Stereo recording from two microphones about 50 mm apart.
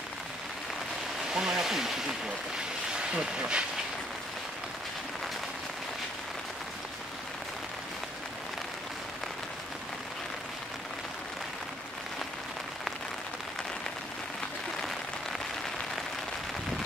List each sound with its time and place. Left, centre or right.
1.3 s speech: centre